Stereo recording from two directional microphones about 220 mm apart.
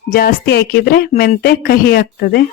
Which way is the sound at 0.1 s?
40° left (ahead or behind).